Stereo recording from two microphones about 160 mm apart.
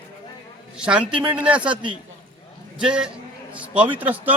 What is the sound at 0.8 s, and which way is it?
Speech, 5° right (ahead or behind).